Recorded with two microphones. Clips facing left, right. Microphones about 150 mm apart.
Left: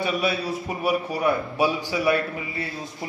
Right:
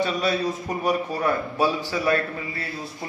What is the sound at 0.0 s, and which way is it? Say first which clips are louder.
A man's voice: right 1 dB; 10° left (ahead or behind).